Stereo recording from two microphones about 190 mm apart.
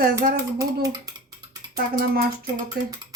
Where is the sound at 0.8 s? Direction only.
20° right (ahead or behind).